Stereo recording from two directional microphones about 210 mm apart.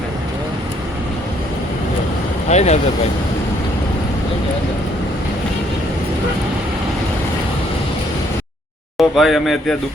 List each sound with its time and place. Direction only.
2.5 s speech: 30° left (ahead or behind)
9.0 s a man's voice: centre (ahead or behind)